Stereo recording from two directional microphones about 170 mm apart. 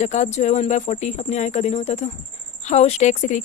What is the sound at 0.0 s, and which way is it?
Speech, 45° left (ahead or behind).